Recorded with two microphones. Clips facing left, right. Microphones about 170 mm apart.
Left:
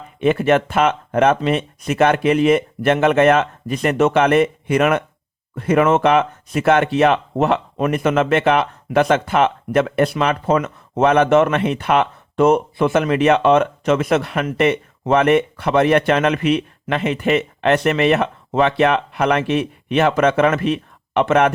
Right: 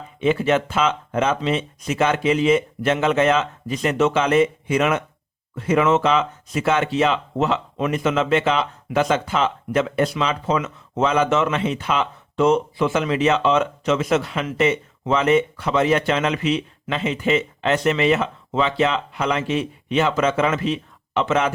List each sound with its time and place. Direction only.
0.2 s speech: 60° left (ahead or behind)